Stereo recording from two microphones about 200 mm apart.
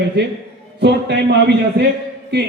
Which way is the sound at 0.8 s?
55° right (ahead or behind).